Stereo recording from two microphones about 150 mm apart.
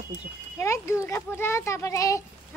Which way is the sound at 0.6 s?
20° left (ahead or behind).